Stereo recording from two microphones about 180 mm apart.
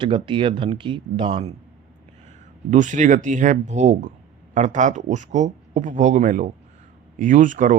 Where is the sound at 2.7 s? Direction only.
45° right (ahead or behind).